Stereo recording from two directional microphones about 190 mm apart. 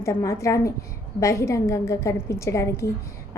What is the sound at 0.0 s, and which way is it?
A woman's voice, 15° left (ahead or behind).